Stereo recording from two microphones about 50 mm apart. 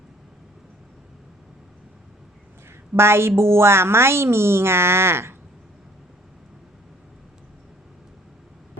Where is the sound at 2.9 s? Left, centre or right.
Right.